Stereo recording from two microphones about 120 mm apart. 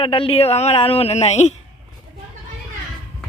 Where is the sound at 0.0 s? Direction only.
50° left (ahead or behind); by 1.5 s 65° left (ahead or behind).